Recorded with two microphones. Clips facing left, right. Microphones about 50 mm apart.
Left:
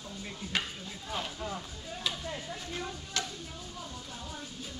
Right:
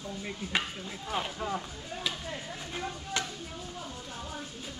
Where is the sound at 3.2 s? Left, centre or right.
Right.